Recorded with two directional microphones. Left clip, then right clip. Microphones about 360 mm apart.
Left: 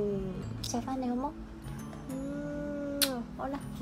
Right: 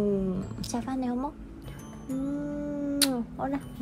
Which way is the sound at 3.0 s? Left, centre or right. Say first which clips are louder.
Right 4 dB; centre.